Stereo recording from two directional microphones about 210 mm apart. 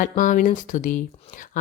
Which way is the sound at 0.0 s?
40° left (ahead or behind).